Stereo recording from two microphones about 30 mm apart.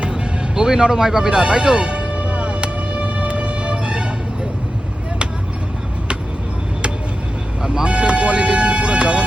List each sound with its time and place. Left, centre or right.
0.1 s music: right
7.6 s vehicle: right
7.9 s vehicle: right